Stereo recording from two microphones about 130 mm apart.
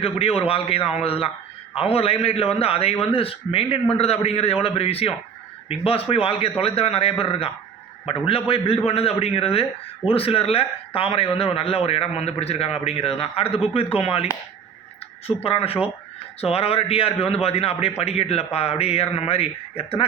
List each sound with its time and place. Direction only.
0.0 s a man's voice: 50° left (ahead or behind)
15.4 s a man's voice: 45° left (ahead or behind)